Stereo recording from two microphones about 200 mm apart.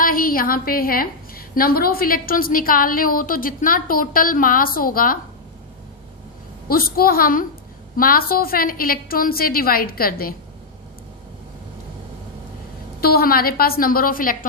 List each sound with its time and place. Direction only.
0.0 s a woman's voice: 45° left (ahead or behind)
6.7 s a woman's voice: 45° left (ahead or behind)
13.0 s a woman's voice: 50° left (ahead or behind)